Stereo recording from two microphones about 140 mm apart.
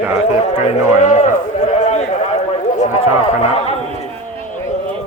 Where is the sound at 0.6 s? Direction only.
50° left (ahead or behind).